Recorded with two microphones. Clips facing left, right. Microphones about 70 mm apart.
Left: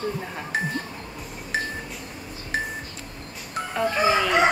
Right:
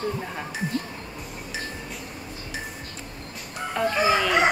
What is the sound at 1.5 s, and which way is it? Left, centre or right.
Music, left.